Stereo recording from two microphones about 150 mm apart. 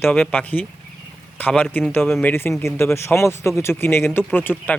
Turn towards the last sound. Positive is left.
turn(degrees=15)  # may be behind; listen again after turning